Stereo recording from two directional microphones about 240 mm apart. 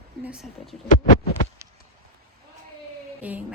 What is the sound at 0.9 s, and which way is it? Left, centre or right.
Heart sounds, left.